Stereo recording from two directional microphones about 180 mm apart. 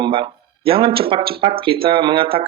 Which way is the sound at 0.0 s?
30° right (ahead or behind).